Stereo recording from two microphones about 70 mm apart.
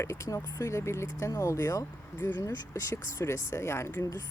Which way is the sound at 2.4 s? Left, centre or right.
Left.